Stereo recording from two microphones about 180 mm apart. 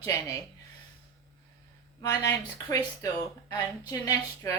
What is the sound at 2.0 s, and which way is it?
A woman's voice, 20° left (ahead or behind).